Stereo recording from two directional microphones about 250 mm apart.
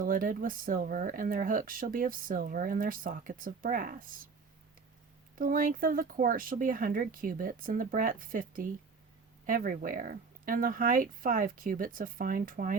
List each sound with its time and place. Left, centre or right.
0.0 s speech: right
5.4 s speech: right